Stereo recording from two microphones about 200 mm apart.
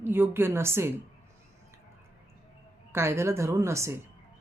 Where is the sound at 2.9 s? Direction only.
15° right (ahead or behind).